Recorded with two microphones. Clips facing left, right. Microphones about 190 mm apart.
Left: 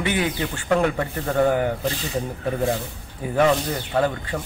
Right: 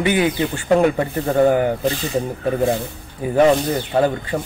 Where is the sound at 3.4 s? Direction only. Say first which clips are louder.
Right 5 dB; 25° right (ahead or behind).